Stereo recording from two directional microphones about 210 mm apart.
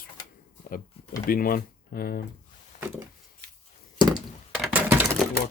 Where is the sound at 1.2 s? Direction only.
45° left (ahead or behind).